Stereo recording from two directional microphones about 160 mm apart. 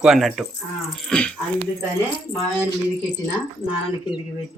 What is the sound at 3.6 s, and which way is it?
Speech, 35° left (ahead or behind).